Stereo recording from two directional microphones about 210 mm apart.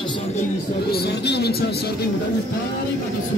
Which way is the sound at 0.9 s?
50° left (ahead or behind).